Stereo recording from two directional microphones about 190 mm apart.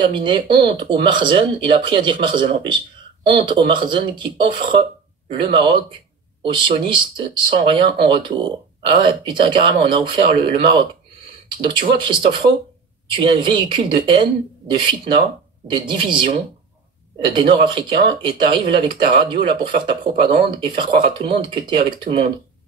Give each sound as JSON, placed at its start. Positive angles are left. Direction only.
{"t": 0.1, "sound": "speech", "side_deg": -25}